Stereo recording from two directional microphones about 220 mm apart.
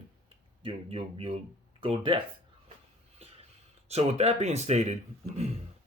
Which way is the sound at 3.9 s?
30° right (ahead or behind).